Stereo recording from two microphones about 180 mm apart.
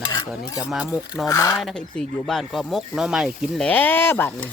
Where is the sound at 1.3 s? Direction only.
20° left (ahead or behind).